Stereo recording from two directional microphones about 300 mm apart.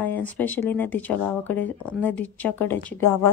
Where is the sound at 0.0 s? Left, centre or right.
Centre.